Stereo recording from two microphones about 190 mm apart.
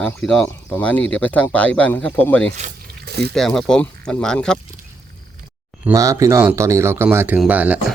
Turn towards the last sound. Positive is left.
turn(degrees=-10)  # may be behind; listen again after turning